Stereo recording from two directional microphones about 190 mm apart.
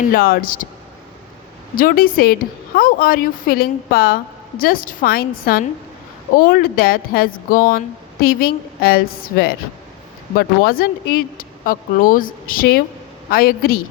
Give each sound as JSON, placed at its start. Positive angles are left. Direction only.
{"t": 0.1, "sound": "a woman's voice", "side_deg": 50}
{"t": 1.7, "sound": "a woman's voice", "side_deg": 50}